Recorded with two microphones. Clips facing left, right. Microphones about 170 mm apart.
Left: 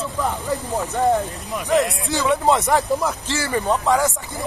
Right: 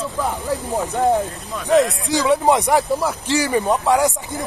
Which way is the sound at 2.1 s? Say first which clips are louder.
Right 2 dB; 15° right (ahead or behind).